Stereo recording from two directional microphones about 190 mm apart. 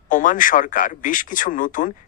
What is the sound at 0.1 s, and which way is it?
Speech, 45° left (ahead or behind).